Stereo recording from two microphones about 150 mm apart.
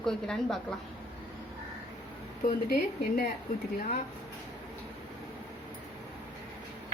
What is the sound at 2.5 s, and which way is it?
Speech, 85° left.